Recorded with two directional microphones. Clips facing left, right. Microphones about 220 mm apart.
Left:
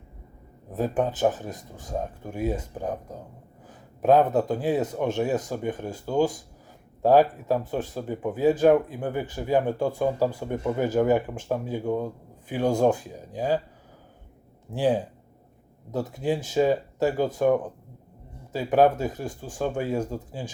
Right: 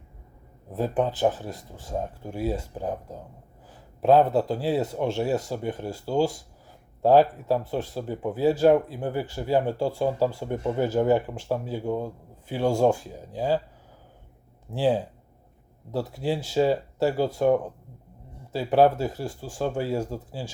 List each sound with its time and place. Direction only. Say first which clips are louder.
0.7 s speech: even; 15° left (ahead or behind)
14.7 s speech: even; 15° left (ahead or behind)